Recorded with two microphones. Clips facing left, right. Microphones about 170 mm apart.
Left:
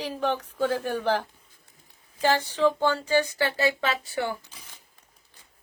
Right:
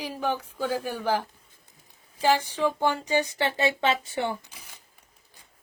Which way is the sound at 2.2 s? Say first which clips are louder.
Left 1 dB; 10° right (ahead or behind).